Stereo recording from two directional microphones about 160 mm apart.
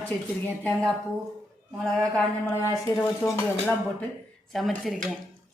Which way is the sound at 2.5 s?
20° left (ahead or behind).